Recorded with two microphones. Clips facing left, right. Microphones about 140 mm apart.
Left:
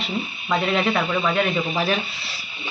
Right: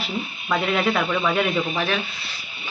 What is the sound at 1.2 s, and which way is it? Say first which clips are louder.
Speech: even; 5° right (ahead or behind).